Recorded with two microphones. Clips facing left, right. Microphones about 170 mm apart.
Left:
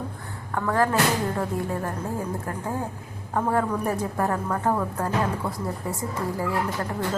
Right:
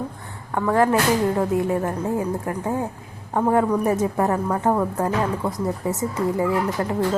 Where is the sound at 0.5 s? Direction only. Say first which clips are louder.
Right 4 dB; 20° right (ahead or behind).